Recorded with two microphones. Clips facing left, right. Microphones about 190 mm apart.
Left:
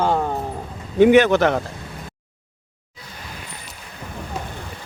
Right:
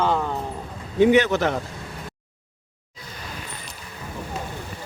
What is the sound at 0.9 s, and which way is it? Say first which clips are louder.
Speech: left 4 dB; 65° left (ahead or behind).